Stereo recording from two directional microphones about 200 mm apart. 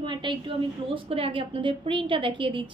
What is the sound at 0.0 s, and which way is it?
A woman's voice, 25° right (ahead or behind).